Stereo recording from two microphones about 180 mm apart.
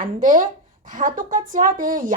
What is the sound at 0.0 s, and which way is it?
Speech, 45° right (ahead or behind).